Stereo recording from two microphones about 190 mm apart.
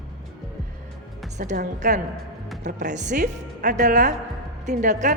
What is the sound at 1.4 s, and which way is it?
A woman's voice, 40° right (ahead or behind).